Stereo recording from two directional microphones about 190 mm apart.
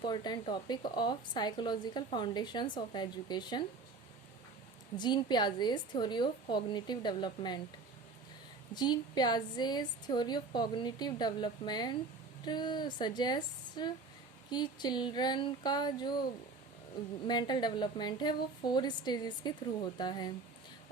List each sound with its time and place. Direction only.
0.0 s speech: 25° left (ahead or behind)
4.9 s speech: 20° left (ahead or behind)
8.7 s speech: 20° left (ahead or behind)
17.2 s speech: 20° left (ahead or behind)